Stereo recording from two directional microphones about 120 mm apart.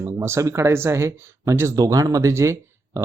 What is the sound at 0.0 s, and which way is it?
Speech, 25° right (ahead or behind).